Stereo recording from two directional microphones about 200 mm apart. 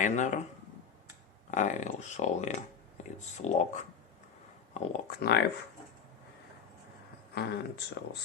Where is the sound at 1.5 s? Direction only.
35° left (ahead or behind).